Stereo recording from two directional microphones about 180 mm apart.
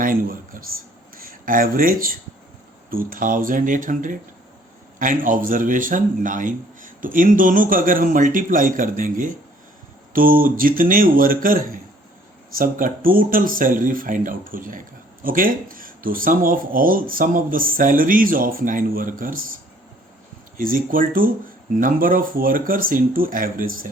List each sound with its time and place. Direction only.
0.0 s a sound: 50° right (ahead or behind)
1.1 s speech: 50° right (ahead or behind)
20.6 s speech: 50° right (ahead or behind)